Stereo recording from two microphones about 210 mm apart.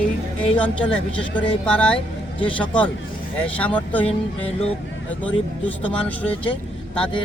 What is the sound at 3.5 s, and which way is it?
Speech, 5° left (ahead or behind).